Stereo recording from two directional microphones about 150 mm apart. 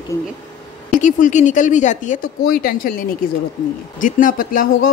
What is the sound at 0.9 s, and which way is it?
Speech, 60° left (ahead or behind).